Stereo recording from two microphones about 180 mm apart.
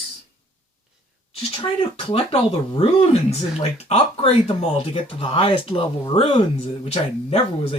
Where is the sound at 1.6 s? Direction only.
30° left (ahead or behind).